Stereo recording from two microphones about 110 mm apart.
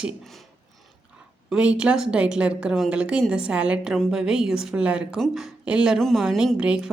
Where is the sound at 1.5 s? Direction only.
10° right (ahead or behind).